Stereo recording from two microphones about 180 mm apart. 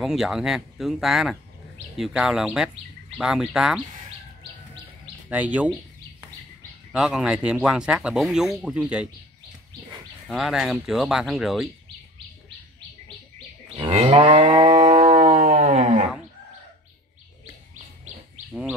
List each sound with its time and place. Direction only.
0.0 s speech: centre (ahead or behind)
5.3 s speech: 10° right (ahead or behind)
6.9 s speech: centre (ahead or behind)
10.2 s speech: centre (ahead or behind)
13.7 s livestock: 35° right (ahead or behind)
18.5 s bird: 5° right (ahead or behind)